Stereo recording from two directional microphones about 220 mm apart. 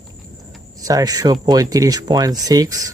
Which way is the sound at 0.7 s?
15° right (ahead or behind).